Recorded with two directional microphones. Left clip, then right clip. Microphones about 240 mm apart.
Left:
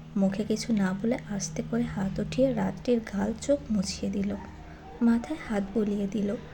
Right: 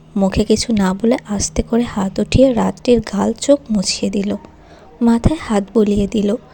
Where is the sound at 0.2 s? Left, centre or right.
Right.